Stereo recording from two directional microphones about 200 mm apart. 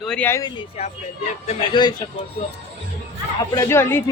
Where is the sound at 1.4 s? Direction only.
30° left (ahead or behind).